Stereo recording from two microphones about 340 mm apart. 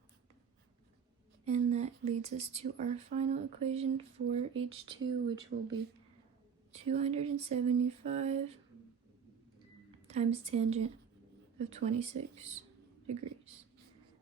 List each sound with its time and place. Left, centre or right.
1.5 s speech: centre
6.7 s speech: centre
10.1 s speech: centre